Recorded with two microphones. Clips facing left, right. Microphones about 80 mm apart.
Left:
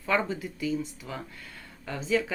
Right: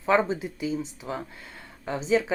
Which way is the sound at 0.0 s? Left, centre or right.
Right.